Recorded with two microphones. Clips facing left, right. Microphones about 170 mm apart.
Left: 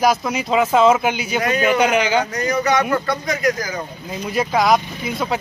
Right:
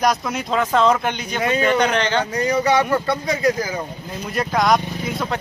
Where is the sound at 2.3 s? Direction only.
30° right (ahead or behind).